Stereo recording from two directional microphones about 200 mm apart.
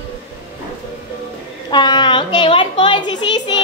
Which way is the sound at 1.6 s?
20° left (ahead or behind).